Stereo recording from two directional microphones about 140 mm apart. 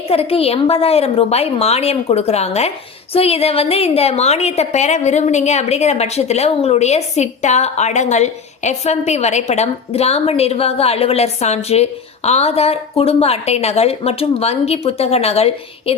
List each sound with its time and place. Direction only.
0.1 s a woman's voice: 45° left (ahead or behind)